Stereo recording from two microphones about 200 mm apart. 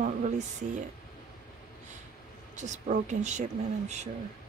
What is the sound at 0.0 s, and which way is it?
Speech, 35° right (ahead or behind).